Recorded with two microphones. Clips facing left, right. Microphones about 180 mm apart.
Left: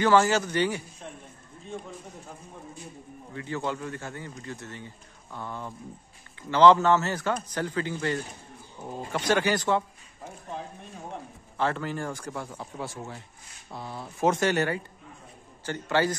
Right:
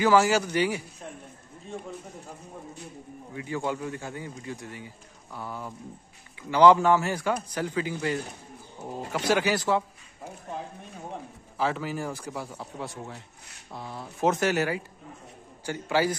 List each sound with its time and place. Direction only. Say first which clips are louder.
0.0 s speech: even; 10° right (ahead or behind)
3.3 s speech: right 1 dB; 15° right (ahead or behind)
11.5 s a man's voice: even; 5° right (ahead or behind)